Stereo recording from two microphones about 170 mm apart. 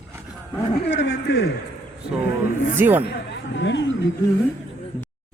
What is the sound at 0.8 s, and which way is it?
Speech, 90° left.